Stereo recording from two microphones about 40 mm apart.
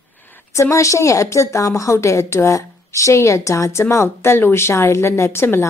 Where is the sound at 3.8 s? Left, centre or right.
Left.